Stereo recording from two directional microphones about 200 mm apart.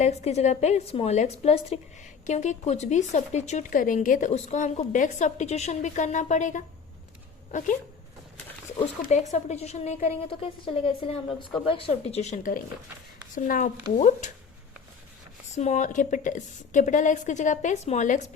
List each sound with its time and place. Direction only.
0.0 s a woman's voice: 35° left (ahead or behind)
9.0 s a woman's voice: 35° left (ahead or behind)
15.5 s a woman's voice: 35° left (ahead or behind)